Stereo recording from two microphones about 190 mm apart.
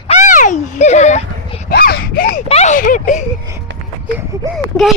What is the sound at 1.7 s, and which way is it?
Wail, 55° left (ahead or behind).